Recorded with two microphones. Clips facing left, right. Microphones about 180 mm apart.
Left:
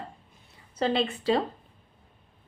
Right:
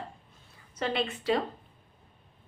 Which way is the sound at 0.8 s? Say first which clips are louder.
Left 5 dB; 30° left (ahead or behind).